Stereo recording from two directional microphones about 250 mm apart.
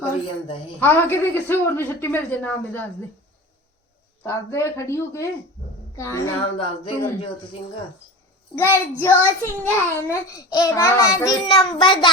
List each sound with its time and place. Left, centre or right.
0.8 s a child's voice: centre
4.2 s a child's voice: centre
8.5 s a child's voice: centre